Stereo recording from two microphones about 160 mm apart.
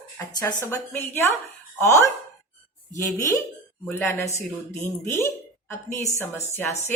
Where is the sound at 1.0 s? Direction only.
15° left (ahead or behind).